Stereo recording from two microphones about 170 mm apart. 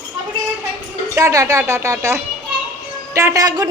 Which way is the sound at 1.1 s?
20° right (ahead or behind).